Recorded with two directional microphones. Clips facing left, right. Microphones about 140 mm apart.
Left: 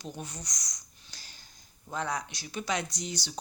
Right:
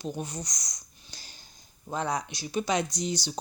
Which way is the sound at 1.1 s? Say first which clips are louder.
Right 3 dB; 20° right (ahead or behind).